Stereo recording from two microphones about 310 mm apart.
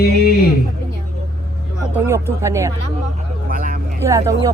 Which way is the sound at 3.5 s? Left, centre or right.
Right.